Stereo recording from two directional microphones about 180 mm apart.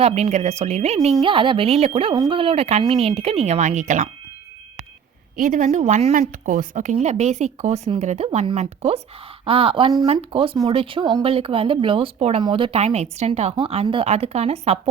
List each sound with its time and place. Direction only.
0.0 s speech: 40° right (ahead or behind)
5.4 s speech: 45° right (ahead or behind)